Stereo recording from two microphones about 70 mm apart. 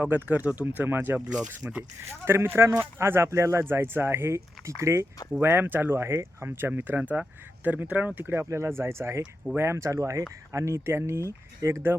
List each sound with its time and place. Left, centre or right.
0.0 s speech: right
5.4 s speech: right